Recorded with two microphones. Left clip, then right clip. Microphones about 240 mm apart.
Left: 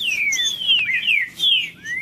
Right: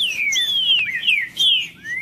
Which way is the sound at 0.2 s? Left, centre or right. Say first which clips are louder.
Right 1 dB; centre.